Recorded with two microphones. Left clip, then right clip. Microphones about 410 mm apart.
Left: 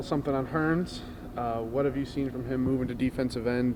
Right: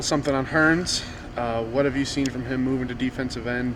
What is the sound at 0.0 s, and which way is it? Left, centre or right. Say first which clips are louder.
Speech: right 6 dB; centre.